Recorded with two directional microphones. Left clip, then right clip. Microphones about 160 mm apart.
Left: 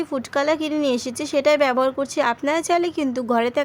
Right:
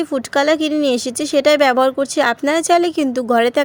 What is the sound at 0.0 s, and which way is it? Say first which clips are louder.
Speech: right 5 dB; 30° right (ahead or behind).